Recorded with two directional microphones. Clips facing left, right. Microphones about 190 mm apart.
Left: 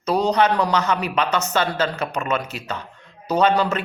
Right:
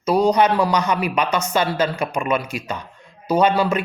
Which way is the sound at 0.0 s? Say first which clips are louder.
Right 2 dB; 10° right (ahead or behind).